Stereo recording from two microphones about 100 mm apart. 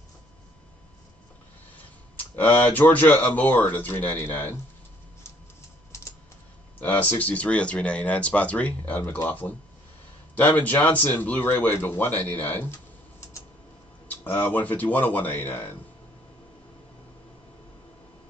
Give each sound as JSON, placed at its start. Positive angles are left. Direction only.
{"t": 2.3, "sound": "speech", "side_deg": 20}
{"t": 6.8, "sound": "speech", "side_deg": 20}
{"t": 10.3, "sound": "speech", "side_deg": 15}
{"t": 14.0, "sound": "speech", "side_deg": 20}